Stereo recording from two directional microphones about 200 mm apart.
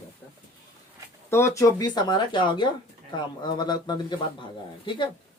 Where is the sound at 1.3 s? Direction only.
15° left (ahead or behind).